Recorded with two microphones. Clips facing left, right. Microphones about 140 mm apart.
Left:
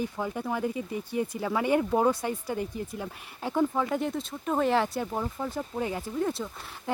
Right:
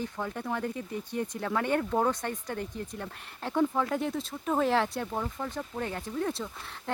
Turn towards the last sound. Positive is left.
turn(degrees=5)  # may be behind; listen again after turning